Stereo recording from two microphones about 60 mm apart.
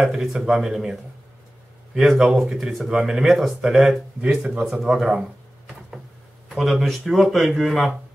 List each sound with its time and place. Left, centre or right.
0.0 s speech: centre
2.0 s speech: centre
4.5 s speech: right
4.9 s speech: centre
6.5 s speech: centre